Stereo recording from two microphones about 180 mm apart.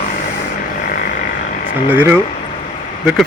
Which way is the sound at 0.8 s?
55° left (ahead or behind).